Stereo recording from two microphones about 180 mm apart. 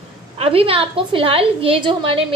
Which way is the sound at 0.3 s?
35° right (ahead or behind).